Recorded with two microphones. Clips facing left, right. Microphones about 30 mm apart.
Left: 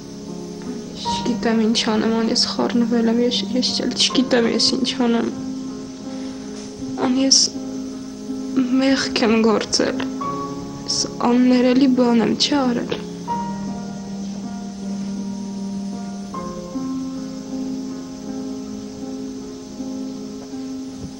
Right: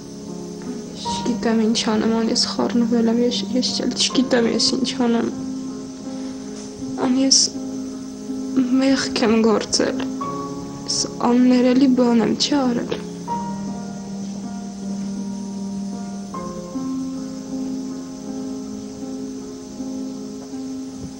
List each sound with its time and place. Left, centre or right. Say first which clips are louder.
1.0 s speech: left 1 dB; centre
7.0 s music: even; centre
8.5 s speech: even; centre
12.0 s music: left 1 dB; centre
16.3 s music: left 1 dB; centre